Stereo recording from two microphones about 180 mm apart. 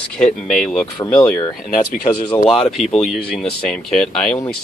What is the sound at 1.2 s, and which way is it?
Speech, 15° left (ahead or behind).